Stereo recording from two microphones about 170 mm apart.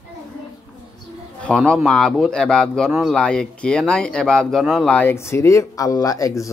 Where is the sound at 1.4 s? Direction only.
5° left (ahead or behind).